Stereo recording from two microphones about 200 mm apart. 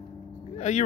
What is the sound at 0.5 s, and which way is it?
Vehicle, 35° left (ahead or behind).